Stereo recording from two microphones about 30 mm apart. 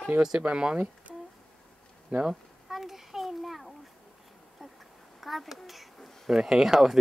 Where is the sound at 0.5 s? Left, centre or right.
Right.